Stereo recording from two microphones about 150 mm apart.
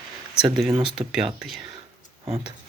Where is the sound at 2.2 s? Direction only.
30° right (ahead or behind).